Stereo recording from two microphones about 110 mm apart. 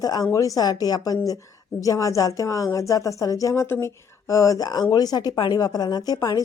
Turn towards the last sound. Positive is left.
turn(degrees=35)  # may be behind; listen again after turning